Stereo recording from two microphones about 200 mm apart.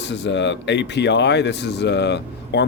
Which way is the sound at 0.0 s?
60° left (ahead or behind).